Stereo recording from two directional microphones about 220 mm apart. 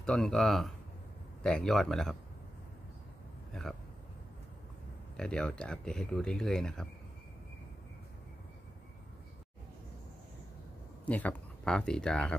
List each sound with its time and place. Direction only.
0.0 s speech: centre (ahead or behind)
5.1 s speech: 5° left (ahead or behind)
11.1 s speech: 5° left (ahead or behind)